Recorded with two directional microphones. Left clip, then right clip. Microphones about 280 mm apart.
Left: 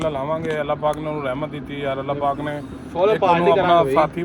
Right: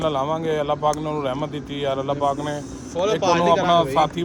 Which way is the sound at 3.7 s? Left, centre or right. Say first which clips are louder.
Left 2 dB; centre.